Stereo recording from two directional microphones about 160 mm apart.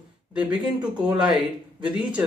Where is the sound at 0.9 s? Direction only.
25° right (ahead or behind).